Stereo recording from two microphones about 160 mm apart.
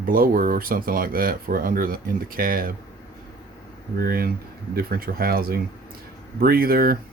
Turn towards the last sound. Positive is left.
turn(degrees=-65)  # may be behind; listen again after turning